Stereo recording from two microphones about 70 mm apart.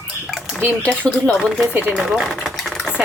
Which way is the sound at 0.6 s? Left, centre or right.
Centre.